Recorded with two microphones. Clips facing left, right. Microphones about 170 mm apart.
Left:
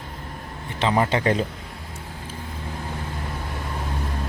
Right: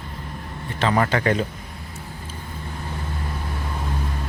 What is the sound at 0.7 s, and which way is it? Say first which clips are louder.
Speech: even; 15° left (ahead or behind).